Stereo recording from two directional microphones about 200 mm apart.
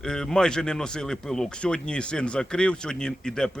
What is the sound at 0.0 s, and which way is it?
Speech, 5° left (ahead or behind).